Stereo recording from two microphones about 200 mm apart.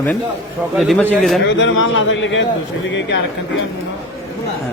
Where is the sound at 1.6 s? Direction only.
70° left (ahead or behind).